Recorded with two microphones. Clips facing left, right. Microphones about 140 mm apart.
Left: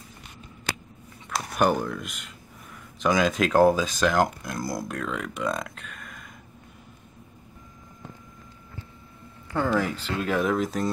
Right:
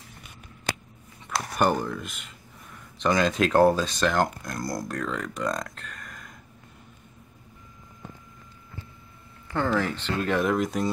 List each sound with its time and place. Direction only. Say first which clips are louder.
1.5 s speech: left 1 dB; centre (ahead or behind)
9.5 s speech: left 1 dB; 10° left (ahead or behind)